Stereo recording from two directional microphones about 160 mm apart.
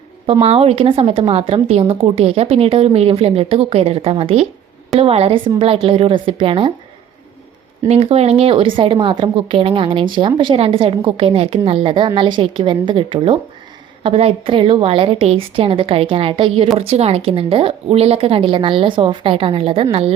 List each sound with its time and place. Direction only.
0.4 s a woman's voice: 40° right (ahead or behind)
7.9 s a woman's voice: 40° right (ahead or behind)